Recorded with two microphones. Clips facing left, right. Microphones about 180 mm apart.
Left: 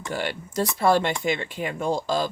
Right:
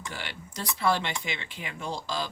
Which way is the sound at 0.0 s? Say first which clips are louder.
Left 10 dB; 45° left (ahead or behind).